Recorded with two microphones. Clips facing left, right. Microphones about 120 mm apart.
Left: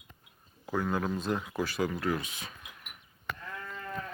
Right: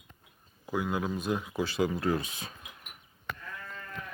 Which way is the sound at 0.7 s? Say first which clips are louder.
Even; 10° right (ahead or behind).